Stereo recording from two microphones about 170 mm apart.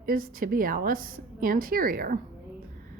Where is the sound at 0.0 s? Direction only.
55° right (ahead or behind).